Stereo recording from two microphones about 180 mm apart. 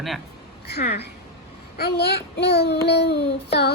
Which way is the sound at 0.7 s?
65° left (ahead or behind).